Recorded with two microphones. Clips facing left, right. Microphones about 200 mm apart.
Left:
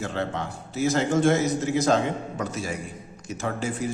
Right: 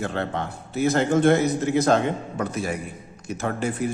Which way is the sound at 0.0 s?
60° right (ahead or behind).